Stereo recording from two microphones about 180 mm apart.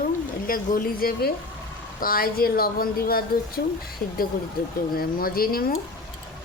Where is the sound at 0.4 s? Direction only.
50° left (ahead or behind).